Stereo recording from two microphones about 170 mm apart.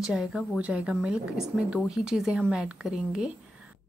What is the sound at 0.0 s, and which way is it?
A woman's voice, 5° right (ahead or behind).